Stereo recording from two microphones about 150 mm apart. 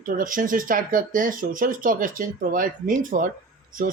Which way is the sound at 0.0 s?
65° right (ahead or behind).